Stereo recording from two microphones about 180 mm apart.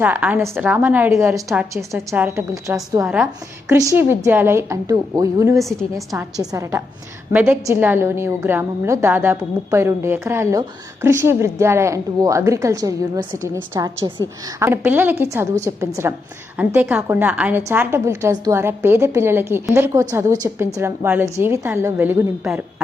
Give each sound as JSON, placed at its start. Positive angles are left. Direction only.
{"t": 0.0, "sound": "a woman's voice", "side_deg": -10}